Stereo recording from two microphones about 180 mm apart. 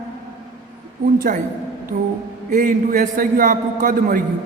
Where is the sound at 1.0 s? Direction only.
45° right (ahead or behind).